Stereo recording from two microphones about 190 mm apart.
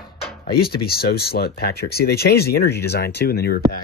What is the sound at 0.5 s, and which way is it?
Speech, 55° left (ahead or behind).